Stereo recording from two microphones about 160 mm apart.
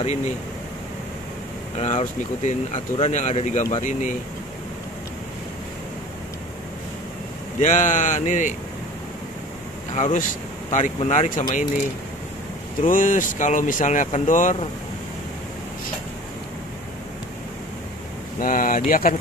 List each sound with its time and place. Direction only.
1.8 s speech: 45° left (ahead or behind)
7.6 s speech: 50° left (ahead or behind)
9.9 s speech: 50° left (ahead or behind)
12.8 s speech: 55° left (ahead or behind)
18.4 s speech: 60° left (ahead or behind)